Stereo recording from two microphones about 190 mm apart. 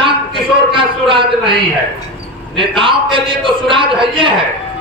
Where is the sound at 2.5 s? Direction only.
25° right (ahead or behind).